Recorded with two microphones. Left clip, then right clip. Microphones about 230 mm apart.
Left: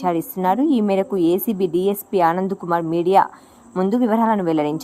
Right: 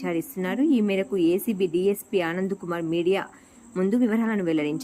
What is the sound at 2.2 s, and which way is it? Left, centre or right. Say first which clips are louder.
A woman's voice: left 9 dB; left.